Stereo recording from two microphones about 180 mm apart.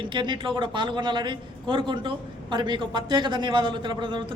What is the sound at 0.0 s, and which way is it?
A man's voice, 25° right (ahead or behind).